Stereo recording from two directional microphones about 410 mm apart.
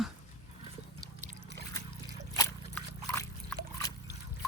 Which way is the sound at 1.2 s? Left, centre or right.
Right.